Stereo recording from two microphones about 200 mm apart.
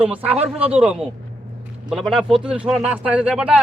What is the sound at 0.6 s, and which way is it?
A man's voice, 5° right (ahead or behind).